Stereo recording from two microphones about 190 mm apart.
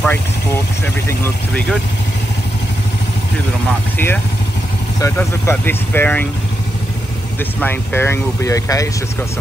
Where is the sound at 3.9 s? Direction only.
10° left (ahead or behind).